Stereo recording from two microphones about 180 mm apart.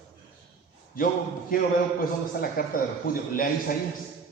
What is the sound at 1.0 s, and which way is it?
Speech, 55° left (ahead or behind).